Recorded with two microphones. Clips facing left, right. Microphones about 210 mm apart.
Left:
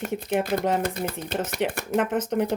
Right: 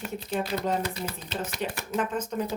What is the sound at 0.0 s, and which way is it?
Speech, 55° left (ahead or behind).